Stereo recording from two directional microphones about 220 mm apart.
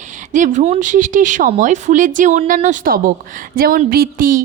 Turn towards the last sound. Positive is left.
turn(degrees=-40)  # may be behind; listen again after turning